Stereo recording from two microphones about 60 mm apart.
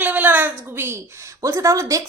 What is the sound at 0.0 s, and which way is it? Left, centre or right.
A woman's voice, right.